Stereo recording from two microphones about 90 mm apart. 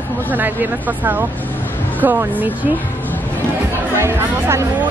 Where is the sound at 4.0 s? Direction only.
30° right (ahead or behind).